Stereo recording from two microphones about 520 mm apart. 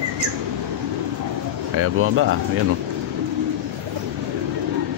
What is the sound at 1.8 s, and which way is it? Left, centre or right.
Speech, right.